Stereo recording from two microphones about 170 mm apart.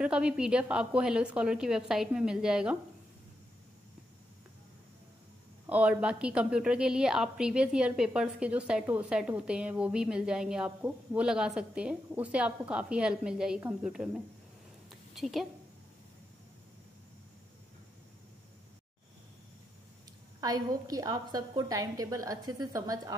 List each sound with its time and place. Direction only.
0.0 s a woman's voice: 5° right (ahead or behind)
5.7 s a woman's voice: 5° right (ahead or behind)
14.9 s a sound: centre (ahead or behind)
20.3 s a woman's voice: 20° right (ahead or behind)